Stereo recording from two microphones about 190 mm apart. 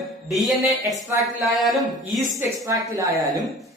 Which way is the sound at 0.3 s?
Centre (ahead or behind).